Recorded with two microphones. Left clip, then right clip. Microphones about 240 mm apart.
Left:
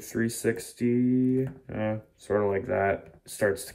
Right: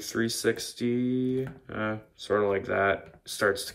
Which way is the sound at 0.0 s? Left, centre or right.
Centre.